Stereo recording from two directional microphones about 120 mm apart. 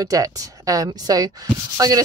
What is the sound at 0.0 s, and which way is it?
Speech, 30° right (ahead or behind).